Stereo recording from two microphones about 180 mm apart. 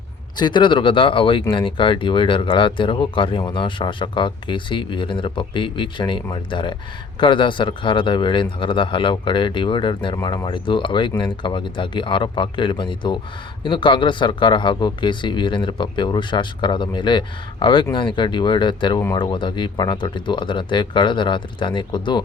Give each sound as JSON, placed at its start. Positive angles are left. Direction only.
{"t": 0.3, "sound": "speech", "side_deg": 25}